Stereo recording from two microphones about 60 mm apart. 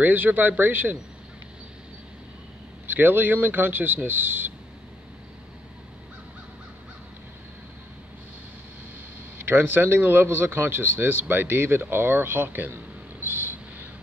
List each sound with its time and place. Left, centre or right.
0.0 s speech: right
2.9 s speech: right
9.4 s speech: right